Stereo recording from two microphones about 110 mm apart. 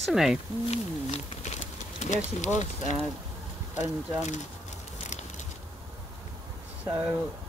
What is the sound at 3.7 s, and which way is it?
Speech, 90° left.